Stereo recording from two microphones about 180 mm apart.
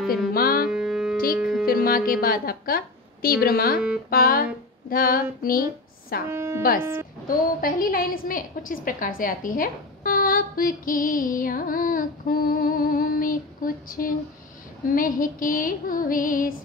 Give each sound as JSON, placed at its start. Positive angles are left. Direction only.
{"t": 0.3, "sound": "music", "side_deg": 55}
{"t": 0.7, "sound": "music", "side_deg": -5}
{"t": 1.1, "sound": "music", "side_deg": 55}
{"t": 1.4, "sound": "music", "side_deg": 0}
{"t": 1.7, "sound": "a woman's voice", "side_deg": 55}
{"t": 6.3, "sound": "speech", "side_deg": -15}
{"t": 7.2, "sound": "a woman's voice", "side_deg": 50}